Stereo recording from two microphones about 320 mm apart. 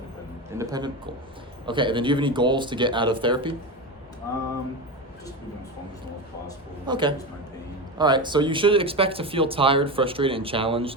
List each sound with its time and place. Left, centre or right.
0.5 s speech: centre
6.8 s speech: centre